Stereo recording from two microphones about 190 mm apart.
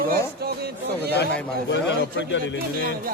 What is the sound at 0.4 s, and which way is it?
Speech, 55° right (ahead or behind).